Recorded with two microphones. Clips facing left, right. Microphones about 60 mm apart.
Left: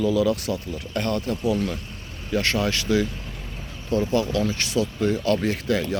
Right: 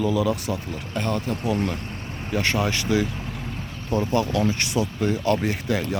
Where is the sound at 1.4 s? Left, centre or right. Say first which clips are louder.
Left 1 dB; right.